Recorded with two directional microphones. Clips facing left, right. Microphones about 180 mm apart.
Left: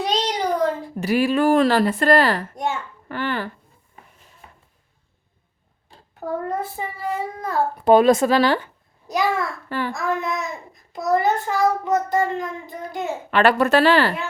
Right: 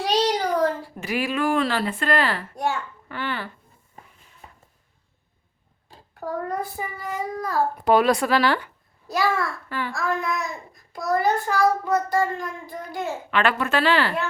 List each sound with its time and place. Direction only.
0.0 s child singing: 20° left (ahead or behind)
0.9 s a woman's voice: 35° left (ahead or behind)
4.4 s a sound: 35° right (ahead or behind)
6.1 s a child's voice: 25° left (ahead or behind)
9.6 s a child's voice: 40° left (ahead or behind)
9.9 s a child's voice: 20° left (ahead or behind)
13.3 s a woman's voice: 40° left (ahead or behind)